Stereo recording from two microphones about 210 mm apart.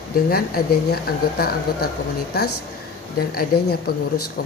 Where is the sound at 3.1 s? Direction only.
45° left (ahead or behind).